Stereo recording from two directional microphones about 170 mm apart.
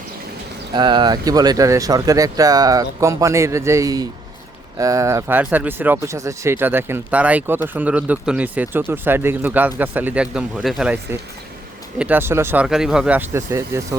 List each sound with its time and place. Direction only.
0.7 s speech: 25° right (ahead or behind)